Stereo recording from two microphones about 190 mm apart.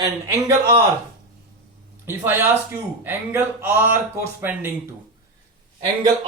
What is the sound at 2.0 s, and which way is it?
Speech, 10° right (ahead or behind).